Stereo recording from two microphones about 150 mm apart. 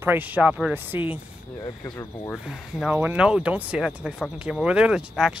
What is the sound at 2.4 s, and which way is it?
Speech, 10° right (ahead or behind).